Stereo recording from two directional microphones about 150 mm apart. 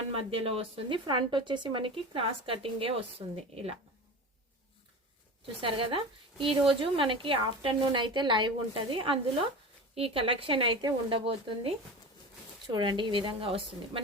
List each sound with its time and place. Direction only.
0.1 s speech: 40° right (ahead or behind)
5.5 s speech: 35° right (ahead or behind)